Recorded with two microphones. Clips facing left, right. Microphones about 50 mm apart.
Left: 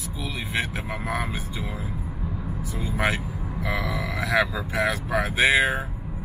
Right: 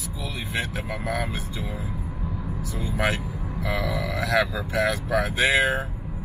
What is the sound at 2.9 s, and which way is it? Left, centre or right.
Speech, left.